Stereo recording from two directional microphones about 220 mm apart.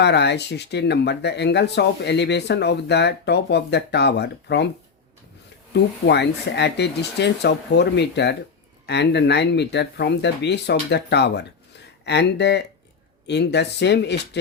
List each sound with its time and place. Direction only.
0.0 s speech: 50° left (ahead or behind)
5.7 s speech: 50° left (ahead or behind)